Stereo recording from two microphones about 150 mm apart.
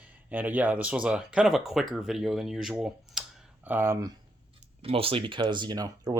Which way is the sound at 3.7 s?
15° right (ahead or behind).